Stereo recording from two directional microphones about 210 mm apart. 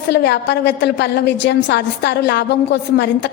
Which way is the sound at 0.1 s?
55° left (ahead or behind).